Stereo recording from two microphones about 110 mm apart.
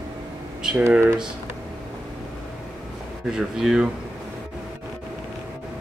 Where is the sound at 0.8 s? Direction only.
20° right (ahead or behind).